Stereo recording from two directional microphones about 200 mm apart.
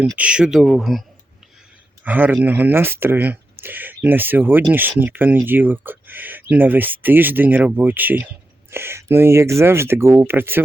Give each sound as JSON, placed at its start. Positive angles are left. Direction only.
{"t": 0.2, "sound": "speech", "side_deg": -5}
{"t": 2.0, "sound": "speech", "side_deg": -10}